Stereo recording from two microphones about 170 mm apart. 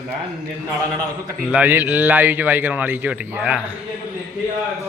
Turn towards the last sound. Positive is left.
turn(degrees=-10)  # may be behind; listen again after turning